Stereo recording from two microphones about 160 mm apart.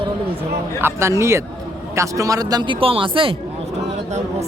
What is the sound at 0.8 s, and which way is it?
Speech, 15° right (ahead or behind).